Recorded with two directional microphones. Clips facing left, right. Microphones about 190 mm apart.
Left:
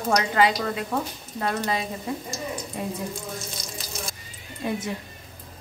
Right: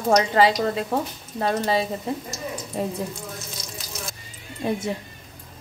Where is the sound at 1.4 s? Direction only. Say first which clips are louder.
Right 4 dB; 30° right (ahead or behind).